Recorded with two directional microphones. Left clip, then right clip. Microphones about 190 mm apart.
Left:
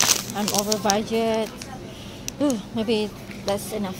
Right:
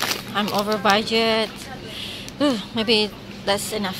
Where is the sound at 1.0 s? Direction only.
Centre (ahead or behind).